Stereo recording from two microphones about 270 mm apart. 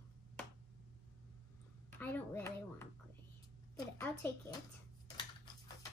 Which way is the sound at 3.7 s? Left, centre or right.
Centre.